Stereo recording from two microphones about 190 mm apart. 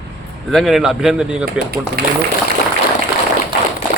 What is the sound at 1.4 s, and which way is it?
Speech, 55° right (ahead or behind).